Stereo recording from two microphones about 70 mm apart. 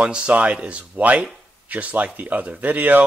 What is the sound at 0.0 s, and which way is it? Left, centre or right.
Speech, centre.